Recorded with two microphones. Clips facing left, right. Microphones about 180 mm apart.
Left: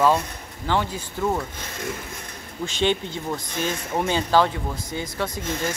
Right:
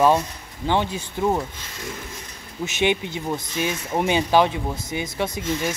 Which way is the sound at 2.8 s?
15° right (ahead or behind).